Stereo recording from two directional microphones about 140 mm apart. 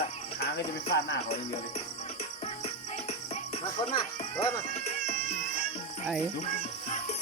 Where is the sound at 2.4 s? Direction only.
45° left (ahead or behind).